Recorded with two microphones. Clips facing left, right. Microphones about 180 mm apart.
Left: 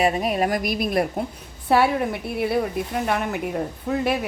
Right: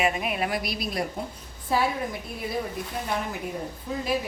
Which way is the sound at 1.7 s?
70° left (ahead or behind).